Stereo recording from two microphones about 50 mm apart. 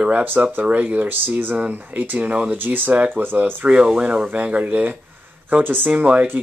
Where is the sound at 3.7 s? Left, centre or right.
Centre.